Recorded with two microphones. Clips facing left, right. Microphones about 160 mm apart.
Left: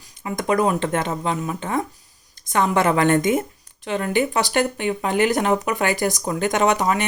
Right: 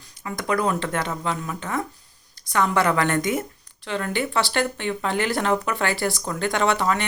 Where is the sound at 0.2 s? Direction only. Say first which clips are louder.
Left 4 dB; 20° left (ahead or behind).